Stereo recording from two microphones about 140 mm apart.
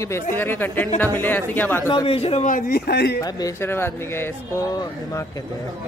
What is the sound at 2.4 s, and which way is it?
Speech, 75° left (ahead or behind).